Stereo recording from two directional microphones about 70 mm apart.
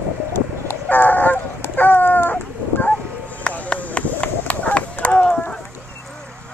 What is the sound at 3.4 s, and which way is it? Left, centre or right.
Run, centre.